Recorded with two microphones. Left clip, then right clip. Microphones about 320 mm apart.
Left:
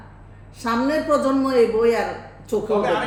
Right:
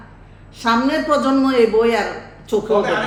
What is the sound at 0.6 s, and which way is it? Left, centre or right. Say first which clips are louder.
Speech: right 4 dB; centre.